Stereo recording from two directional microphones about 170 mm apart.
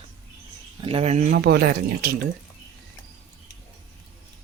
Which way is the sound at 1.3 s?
65° right (ahead or behind).